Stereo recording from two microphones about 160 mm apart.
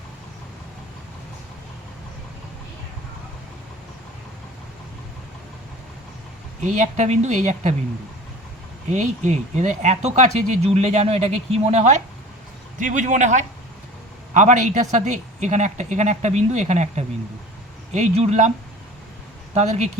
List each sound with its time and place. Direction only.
6.6 s speech: 50° right (ahead or behind)
8.9 s speech: 45° right (ahead or behind)
19.5 s speech: 45° right (ahead or behind)